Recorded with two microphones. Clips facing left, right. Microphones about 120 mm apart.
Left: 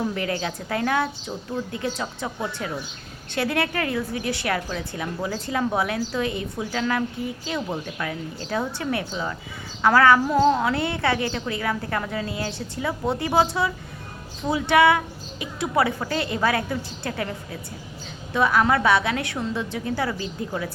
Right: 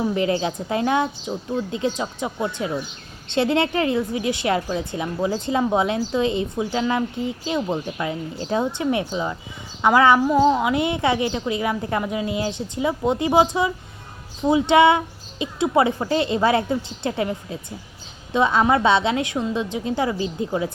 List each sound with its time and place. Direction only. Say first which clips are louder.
0.1 s a woman's voice: right 6 dB; 20° right (ahead or behind)